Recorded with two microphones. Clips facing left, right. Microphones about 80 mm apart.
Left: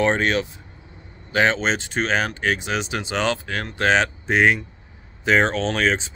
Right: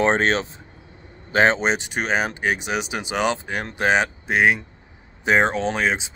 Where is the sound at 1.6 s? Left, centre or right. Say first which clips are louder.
Even; centre.